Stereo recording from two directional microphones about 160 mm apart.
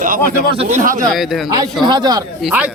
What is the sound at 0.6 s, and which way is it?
Speech, 50° right (ahead or behind).